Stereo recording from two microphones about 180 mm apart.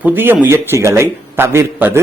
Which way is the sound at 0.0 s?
10° right (ahead or behind).